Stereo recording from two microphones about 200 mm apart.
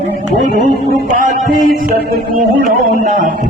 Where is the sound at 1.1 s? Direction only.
40° right (ahead or behind).